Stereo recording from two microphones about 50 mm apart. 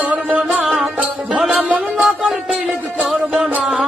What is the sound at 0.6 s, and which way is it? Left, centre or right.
Music, centre.